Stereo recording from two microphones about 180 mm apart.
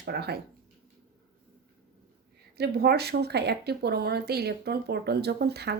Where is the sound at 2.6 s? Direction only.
65° right (ahead or behind).